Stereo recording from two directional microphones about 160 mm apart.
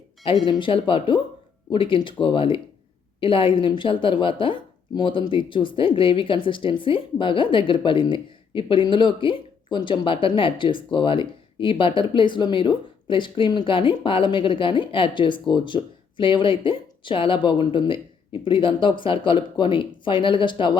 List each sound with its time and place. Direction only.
0.4 s speech: 30° left (ahead or behind)